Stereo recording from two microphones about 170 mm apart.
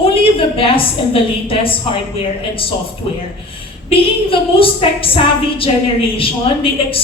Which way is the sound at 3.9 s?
35° left (ahead or behind).